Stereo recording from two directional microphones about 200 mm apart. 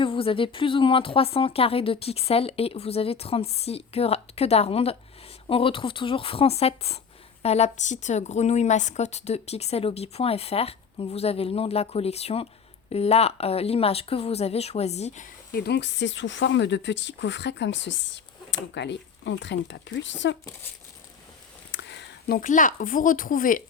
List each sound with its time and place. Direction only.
0.0 s a woman's voice: 25° left (ahead or behind)
15.5 s speech: 55° left (ahead or behind)
21.7 s a sound: 60° left (ahead or behind)
22.4 s speech: 40° left (ahead or behind)